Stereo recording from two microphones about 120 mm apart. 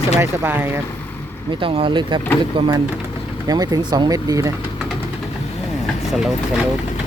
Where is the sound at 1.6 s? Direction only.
45° right (ahead or behind); by 4.5 s 30° right (ahead or behind).